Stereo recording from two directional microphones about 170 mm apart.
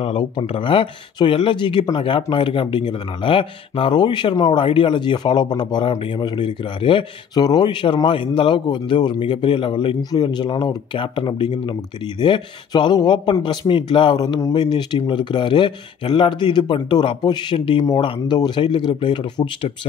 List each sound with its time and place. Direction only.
0.0 s speech: 35° left (ahead or behind)